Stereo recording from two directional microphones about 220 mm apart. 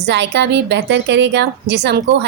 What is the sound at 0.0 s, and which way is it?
A woman's voice, 50° right (ahead or behind).